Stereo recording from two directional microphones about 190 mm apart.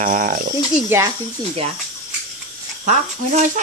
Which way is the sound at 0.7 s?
10° right (ahead or behind).